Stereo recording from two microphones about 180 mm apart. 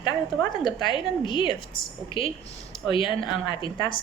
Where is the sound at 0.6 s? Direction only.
25° left (ahead or behind).